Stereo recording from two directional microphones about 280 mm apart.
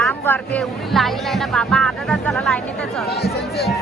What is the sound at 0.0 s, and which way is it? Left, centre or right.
Speech, centre.